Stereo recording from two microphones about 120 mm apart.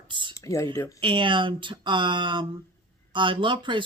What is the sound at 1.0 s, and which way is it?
Speech, 45° right (ahead or behind).